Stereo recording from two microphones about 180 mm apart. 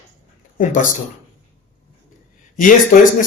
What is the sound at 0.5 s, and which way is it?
Speech, 45° left (ahead or behind).